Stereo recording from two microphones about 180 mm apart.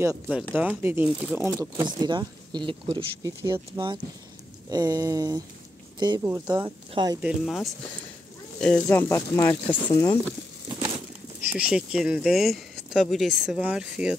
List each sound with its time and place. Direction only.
0.0 s speech: 15° right (ahead or behind)
1.5 s speech: 25° right (ahead or behind)
3.4 s speech: 15° right (ahead or behind)
7.2 s speech: centre (ahead or behind); by 10.1 s 15° left (ahead or behind)
11.5 s speech: 5° right (ahead or behind)